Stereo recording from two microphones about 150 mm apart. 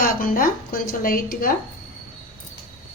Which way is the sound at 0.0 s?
65° left (ahead or behind).